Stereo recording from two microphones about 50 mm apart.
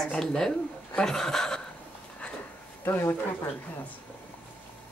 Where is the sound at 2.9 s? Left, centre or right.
Left.